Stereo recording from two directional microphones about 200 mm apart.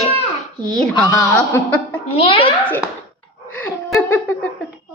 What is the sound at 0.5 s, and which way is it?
Speech, 20° right (ahead or behind).